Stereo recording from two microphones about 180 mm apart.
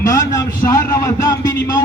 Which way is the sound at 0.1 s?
20° left (ahead or behind).